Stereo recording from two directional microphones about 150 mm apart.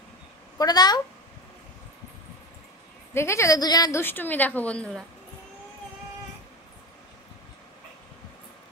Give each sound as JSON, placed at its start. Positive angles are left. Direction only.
{"t": 0.6, "sound": "a woman's voice", "side_deg": 25}
{"t": 3.2, "sound": "a woman's voice", "side_deg": 20}
{"t": 4.0, "sound": "speech", "side_deg": 15}